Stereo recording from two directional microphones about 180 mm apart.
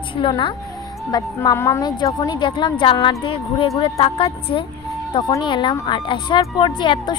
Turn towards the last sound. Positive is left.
turn(degrees=25)  # may be behind; listen again after turning